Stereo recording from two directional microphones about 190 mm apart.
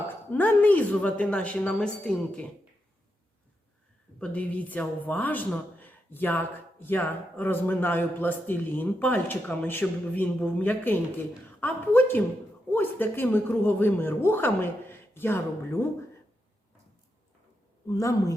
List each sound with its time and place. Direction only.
0.1 s speech: 10° left (ahead or behind)
4.2 s speech: 10° left (ahead or behind)
17.8 s speech: 15° left (ahead or behind)